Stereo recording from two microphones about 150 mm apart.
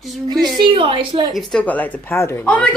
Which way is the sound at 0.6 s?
35° right (ahead or behind).